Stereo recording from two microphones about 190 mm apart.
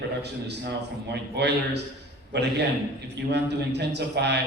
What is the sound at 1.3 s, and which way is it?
A man's voice, 60° right (ahead or behind).